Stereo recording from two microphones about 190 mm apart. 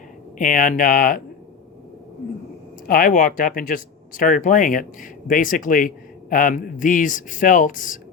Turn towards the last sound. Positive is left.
turn(degrees=45)  # may be behind; listen again after turning